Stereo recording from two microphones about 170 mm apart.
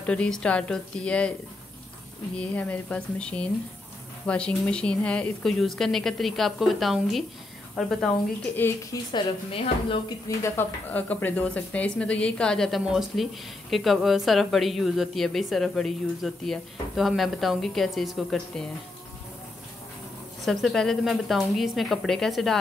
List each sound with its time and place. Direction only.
0.0 s a woman's voice: 5° left (ahead or behind)
2.3 s a woman's voice: 10° left (ahead or behind)
9.1 s a woman's voice: 30° left (ahead or behind)
10.2 s speech: 15° left (ahead or behind); by 18.4 s centre (ahead or behind)
20.4 s speech: centre (ahead or behind)